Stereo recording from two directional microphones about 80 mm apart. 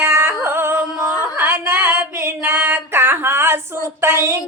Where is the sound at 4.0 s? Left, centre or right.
Right.